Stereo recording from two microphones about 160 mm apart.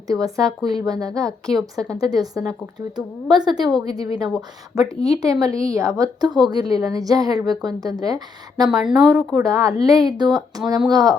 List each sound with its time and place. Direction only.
0.1 s a woman's voice: 20° right (ahead or behind)
0.4 s a woman's voice: centre (ahead or behind)
0.9 s a woman's voice: 20° right (ahead or behind)
1.5 s a woman's voice: 5° left (ahead or behind)
1.9 s a woman's voice: 25° right (ahead or behind)
8.6 s a woman's voice: 5° right (ahead or behind)
9.4 s a woman's voice: 20° right (ahead or behind)
10.2 s a woman's voice: centre (ahead or behind)
10.7 s a woman's voice: 25° right (ahead or behind)